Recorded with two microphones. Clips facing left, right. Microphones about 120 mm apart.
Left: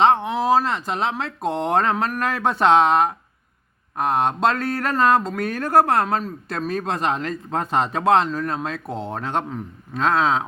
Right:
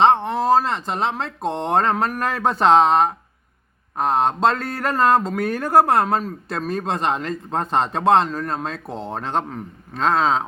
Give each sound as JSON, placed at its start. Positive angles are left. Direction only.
{"t": 0.0, "sound": "speech", "side_deg": 5}